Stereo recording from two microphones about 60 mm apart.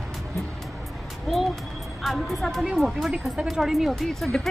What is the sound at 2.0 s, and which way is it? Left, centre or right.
Speech, centre.